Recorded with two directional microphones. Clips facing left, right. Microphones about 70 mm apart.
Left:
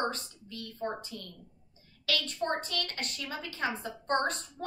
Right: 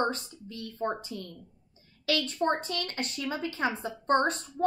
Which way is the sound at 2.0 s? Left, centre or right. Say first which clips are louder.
Right 5 dB; right.